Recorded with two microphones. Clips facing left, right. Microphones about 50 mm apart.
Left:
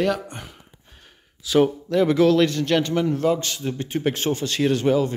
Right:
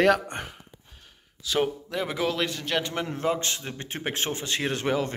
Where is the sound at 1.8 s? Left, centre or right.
Centre.